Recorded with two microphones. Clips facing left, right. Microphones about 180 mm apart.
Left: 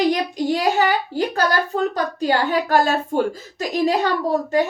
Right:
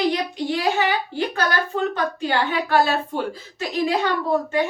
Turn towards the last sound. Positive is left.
turn(degrees=40)  # may be behind; listen again after turning